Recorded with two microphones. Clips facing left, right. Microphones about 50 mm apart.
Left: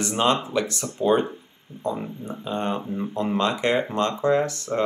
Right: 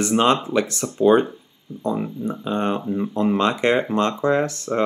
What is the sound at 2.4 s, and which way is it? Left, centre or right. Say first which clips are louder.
Speech: right 3 dB; right.